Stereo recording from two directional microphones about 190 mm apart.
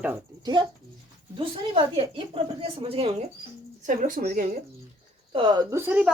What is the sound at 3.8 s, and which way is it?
Speech, 45° right (ahead or behind).